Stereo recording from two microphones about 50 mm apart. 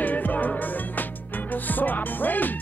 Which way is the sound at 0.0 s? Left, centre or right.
Left.